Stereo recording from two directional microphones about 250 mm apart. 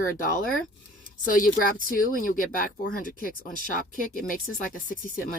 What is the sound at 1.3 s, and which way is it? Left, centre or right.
Speech, left.